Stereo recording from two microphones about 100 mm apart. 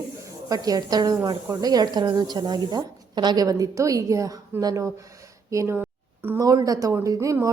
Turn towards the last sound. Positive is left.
turn(degrees=-30)  # may be behind; listen again after turning